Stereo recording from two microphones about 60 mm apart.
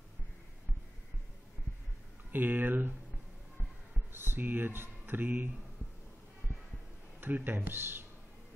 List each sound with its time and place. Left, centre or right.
2.3 s speech: right
4.1 s speech: right
7.2 s speech: right